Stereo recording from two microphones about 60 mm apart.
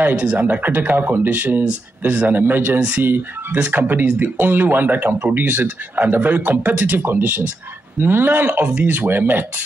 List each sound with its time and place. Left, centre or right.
0.1 s speech: right
0.4 s speech: right